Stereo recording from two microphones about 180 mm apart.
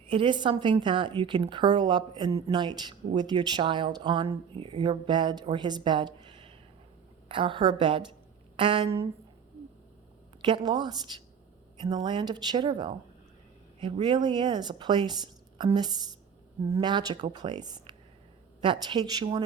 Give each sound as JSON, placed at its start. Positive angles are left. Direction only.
{"t": 0.1, "sound": "speech", "side_deg": -30}
{"t": 10.4, "sound": "speech", "side_deg": -25}
{"t": 13.7, "sound": "speech", "side_deg": -30}